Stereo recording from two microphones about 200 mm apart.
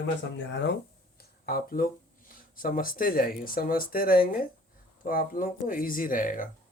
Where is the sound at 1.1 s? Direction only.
45° left (ahead or behind).